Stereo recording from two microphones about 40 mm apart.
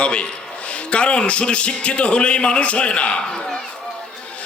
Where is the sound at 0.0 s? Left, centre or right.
Left.